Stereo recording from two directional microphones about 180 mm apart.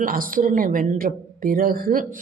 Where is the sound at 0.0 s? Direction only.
50° right (ahead or behind).